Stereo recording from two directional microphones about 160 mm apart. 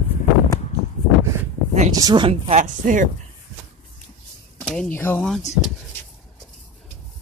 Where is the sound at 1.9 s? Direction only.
25° right (ahead or behind); by 3.0 s 50° right (ahead or behind).